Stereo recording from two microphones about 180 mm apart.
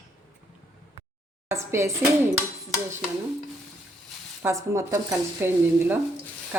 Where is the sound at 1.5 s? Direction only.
15° right (ahead or behind).